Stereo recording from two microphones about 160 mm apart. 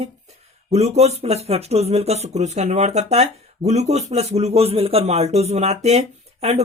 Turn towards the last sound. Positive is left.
turn(degrees=-40)  # may be behind; listen again after turning